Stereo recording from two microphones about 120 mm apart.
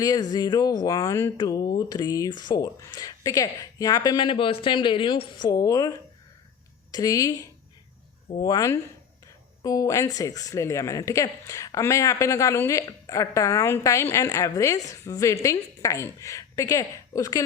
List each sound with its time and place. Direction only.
0.0 s speech: 30° left (ahead or behind)
4.3 s speech: 45° left (ahead or behind); by 5.9 s 30° left (ahead or behind)
6.9 s speech: 30° left (ahead or behind)
8.4 s speech: 35° left (ahead or behind)